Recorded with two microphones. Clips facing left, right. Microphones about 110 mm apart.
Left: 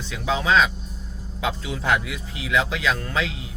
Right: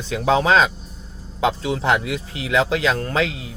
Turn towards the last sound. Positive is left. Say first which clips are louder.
# right 5 dB
turn(degrees=-40)  # may be behind; listen again after turning